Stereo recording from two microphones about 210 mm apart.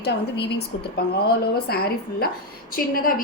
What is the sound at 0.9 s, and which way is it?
A woman's voice, 50° left (ahead or behind).